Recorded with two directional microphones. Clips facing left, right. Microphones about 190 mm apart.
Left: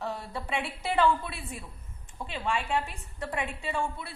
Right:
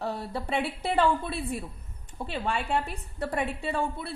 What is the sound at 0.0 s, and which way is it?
A woman's voice, 35° right (ahead or behind).